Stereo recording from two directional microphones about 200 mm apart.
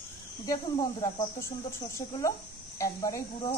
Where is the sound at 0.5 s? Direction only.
20° left (ahead or behind).